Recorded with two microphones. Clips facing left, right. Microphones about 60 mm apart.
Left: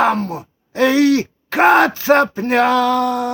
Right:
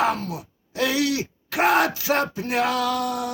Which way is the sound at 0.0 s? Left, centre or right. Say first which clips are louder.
Left 7 dB; left.